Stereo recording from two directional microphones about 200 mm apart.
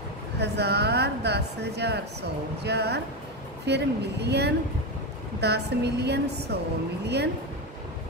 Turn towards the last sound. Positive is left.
turn(degrees=-55)  # may be behind; listen again after turning